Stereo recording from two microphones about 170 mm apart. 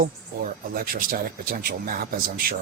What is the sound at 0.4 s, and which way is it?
Speech, 55° right (ahead or behind).